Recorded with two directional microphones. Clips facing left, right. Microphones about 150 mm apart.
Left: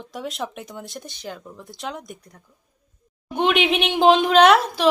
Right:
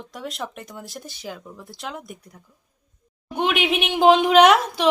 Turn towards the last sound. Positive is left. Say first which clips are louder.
# even
turn(degrees=-15)  # may be behind; listen again after turning